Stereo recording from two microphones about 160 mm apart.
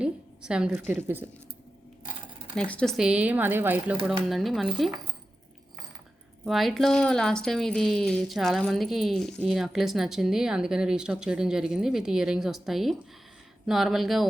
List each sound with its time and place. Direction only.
0.0 s a woman's voice: 5° right (ahead or behind)
2.6 s speech: 5° left (ahead or behind)
3.0 s speech: 5° right (ahead or behind)
4.0 s speech: centre (ahead or behind)
6.4 s speech: centre (ahead or behind)